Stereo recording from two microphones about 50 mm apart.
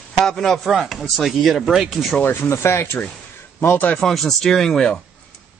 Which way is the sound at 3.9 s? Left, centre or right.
Centre.